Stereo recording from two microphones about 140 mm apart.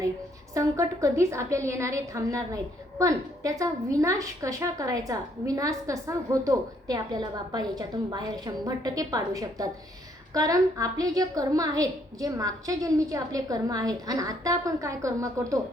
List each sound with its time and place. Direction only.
0.5 s a woman's voice: 20° right (ahead or behind)